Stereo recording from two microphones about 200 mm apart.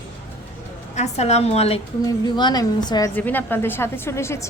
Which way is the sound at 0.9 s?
35° left (ahead or behind).